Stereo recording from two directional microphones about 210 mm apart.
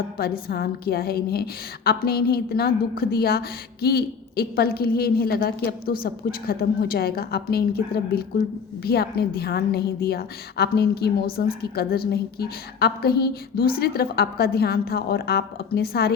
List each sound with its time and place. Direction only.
0.2 s a woman's voice: 45° left (ahead or behind)